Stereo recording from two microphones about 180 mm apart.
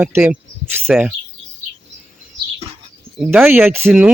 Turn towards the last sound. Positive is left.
turn(degrees=-10)  # may be behind; listen again after turning